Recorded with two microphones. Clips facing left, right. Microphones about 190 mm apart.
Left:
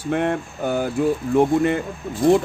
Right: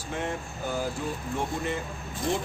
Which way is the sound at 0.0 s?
65° left (ahead or behind).